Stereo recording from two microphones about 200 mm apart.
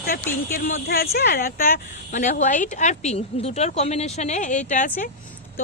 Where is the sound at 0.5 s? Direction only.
50° left (ahead or behind).